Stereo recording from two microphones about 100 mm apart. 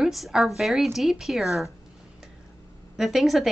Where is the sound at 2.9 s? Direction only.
Centre (ahead or behind).